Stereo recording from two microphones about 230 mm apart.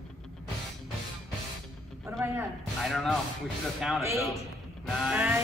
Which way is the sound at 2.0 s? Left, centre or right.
Centre.